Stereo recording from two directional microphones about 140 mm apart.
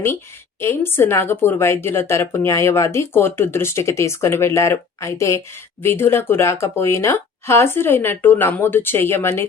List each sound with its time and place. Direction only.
0.6 s speech: 15° left (ahead or behind)